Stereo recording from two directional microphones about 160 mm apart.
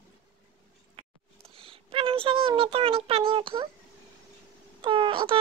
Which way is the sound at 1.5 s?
35° right (ahead or behind).